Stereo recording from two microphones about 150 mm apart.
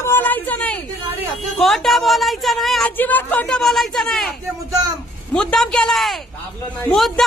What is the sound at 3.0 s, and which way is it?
A woman's voice, 10° left (ahead or behind).